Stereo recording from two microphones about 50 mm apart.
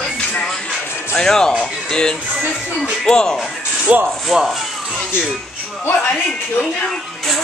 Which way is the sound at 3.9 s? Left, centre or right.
Right.